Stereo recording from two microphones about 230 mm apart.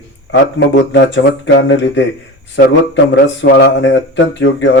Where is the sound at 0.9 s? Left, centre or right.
Left.